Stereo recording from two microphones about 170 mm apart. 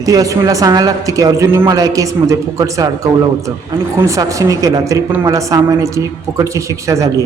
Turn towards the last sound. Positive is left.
turn(degrees=-20)  # may be behind; listen again after turning